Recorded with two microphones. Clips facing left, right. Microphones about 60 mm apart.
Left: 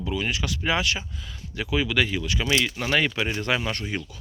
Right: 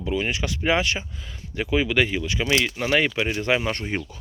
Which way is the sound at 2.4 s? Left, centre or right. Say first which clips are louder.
Right 2 dB; centre.